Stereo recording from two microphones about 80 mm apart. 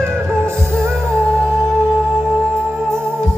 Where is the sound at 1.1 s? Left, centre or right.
Centre.